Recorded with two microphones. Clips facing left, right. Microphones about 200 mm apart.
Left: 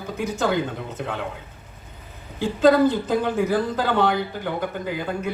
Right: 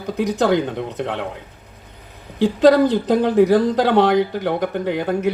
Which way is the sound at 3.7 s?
75° right (ahead or behind).